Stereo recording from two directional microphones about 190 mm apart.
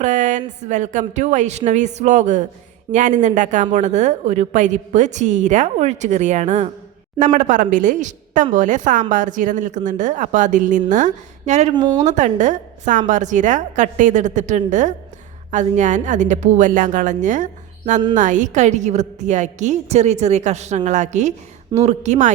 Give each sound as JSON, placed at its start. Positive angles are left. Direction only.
{"t": 0.0, "sound": "a sound", "side_deg": -40}
{"t": 0.6, "sound": "a woman's voice", "side_deg": -40}
{"t": 11.7, "sound": "speech", "side_deg": -20}
{"t": 12.0, "sound": "a woman's voice", "side_deg": -40}